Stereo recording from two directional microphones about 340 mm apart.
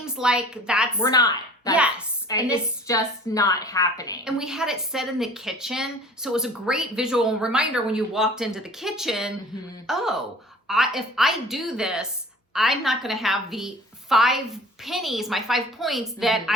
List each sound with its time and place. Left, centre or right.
0.0 s a woman's voice: centre
1.0 s a woman's voice: centre
4.2 s a woman's voice: centre